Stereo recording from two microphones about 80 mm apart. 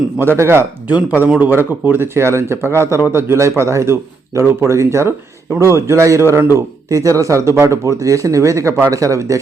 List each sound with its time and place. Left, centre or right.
0.2 s a man's voice: right
0.9 s a man's voice: right